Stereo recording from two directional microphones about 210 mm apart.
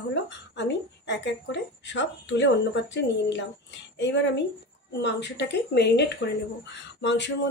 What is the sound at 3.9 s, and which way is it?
Speech, 60° left (ahead or behind).